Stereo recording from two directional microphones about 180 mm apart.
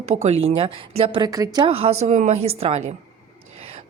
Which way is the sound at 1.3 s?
20° right (ahead or behind).